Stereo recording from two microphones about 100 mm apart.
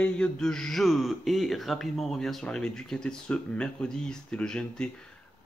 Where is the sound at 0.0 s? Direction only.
10° left (ahead or behind).